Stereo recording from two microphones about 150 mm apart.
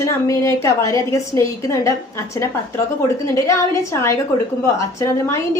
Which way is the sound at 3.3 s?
20° left (ahead or behind).